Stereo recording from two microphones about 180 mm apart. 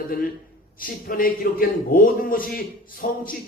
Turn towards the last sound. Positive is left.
turn(degrees=50)  # may be behind; listen again after turning